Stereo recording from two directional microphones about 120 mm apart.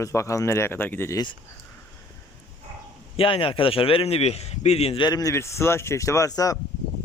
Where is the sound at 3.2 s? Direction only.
50° left (ahead or behind).